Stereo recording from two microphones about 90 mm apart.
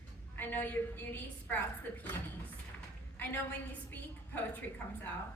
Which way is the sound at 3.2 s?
25° left (ahead or behind).